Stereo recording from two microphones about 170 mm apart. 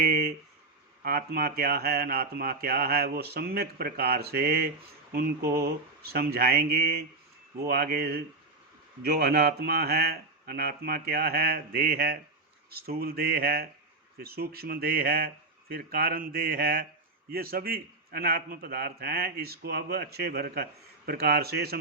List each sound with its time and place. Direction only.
0.0 s speech: 65° right (ahead or behind)